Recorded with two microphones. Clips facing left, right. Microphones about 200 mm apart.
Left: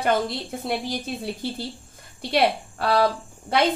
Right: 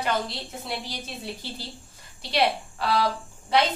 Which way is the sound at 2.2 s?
50° left (ahead or behind).